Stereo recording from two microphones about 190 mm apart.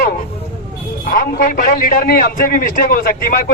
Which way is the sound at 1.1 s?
45° left (ahead or behind).